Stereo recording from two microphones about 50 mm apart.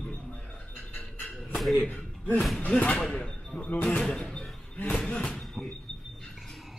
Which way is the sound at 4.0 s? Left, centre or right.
Centre.